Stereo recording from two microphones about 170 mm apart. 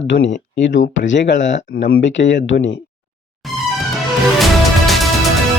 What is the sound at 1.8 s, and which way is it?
Speech, 80° left.